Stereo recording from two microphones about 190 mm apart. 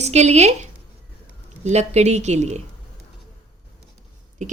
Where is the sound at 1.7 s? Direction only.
35° right (ahead or behind).